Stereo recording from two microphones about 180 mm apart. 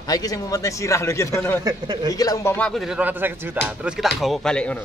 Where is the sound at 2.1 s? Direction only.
20° left (ahead or behind).